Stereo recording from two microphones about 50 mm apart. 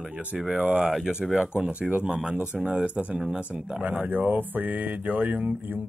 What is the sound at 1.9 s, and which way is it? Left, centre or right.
A man's voice, right.